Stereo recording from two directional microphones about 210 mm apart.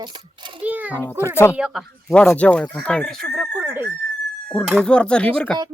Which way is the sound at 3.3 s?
5° right (ahead or behind).